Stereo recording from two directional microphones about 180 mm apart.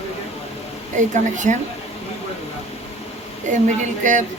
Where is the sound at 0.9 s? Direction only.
45° right (ahead or behind).